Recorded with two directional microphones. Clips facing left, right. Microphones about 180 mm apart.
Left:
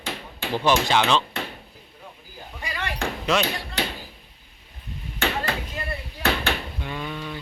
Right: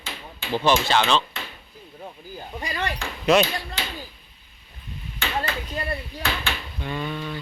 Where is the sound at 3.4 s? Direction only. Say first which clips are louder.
Left 3 dB; 60° left (ahead or behind).